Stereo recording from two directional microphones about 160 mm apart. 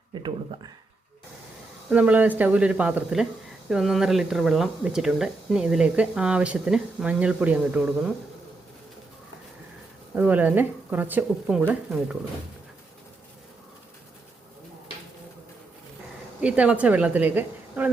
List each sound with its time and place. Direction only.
0.1 s speech: 30° right (ahead or behind)
1.9 s a woman's voice: 10° right (ahead or behind)
10.2 s a woman's voice: 10° right (ahead or behind)
16.4 s a woman's voice: 5° right (ahead or behind)